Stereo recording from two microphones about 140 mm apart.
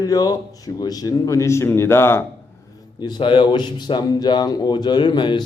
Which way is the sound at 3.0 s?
30° left (ahead or behind).